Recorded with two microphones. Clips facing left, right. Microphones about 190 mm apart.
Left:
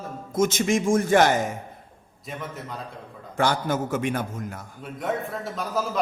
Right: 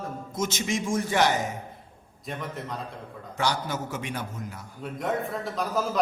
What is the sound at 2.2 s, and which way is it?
Speech, centre (ahead or behind).